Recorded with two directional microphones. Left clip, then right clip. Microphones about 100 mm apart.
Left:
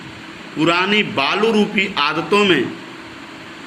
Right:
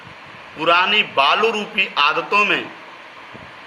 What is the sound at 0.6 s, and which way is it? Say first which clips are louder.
Speech: right 1 dB; 55° right (ahead or behind).